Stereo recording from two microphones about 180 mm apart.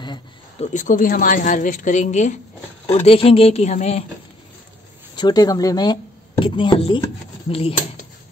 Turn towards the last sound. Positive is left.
turn(degrees=30)  # may be behind; listen again after turning